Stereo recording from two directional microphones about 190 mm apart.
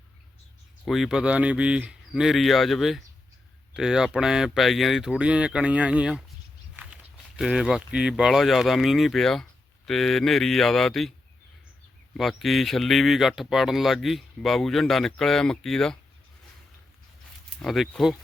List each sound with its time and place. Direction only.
0.9 s speech: centre (ahead or behind)
7.3 s speech: 5° right (ahead or behind)
12.1 s speech: centre (ahead or behind)
17.6 s speech: centre (ahead or behind)